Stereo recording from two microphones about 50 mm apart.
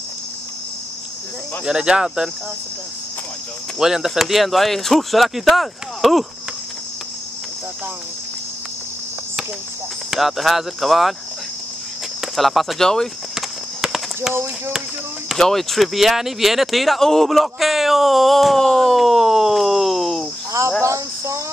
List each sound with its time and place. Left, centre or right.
1.7 s speech: centre
2.0 s speech: centre
3.8 s speech: centre
10.1 s speech: centre
12.2 s speech: centre
13.3 s clip-clop: centre
15.3 s speech: centre
20.8 s cricket: right